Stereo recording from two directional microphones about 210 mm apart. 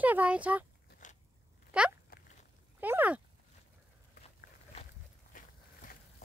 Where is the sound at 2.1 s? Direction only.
45° left (ahead or behind).